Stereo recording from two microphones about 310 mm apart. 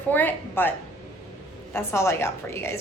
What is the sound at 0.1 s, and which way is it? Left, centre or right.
Speech, centre.